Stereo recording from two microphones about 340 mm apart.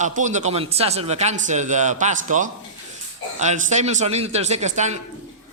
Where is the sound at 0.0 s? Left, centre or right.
Right.